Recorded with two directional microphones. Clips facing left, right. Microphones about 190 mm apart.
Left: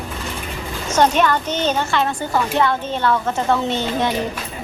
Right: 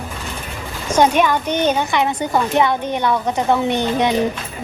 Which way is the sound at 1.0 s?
10° right (ahead or behind).